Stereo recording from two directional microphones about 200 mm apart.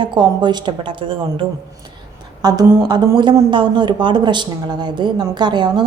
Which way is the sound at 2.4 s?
20° right (ahead or behind).